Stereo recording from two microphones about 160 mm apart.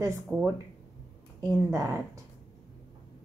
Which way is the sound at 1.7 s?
20° right (ahead or behind).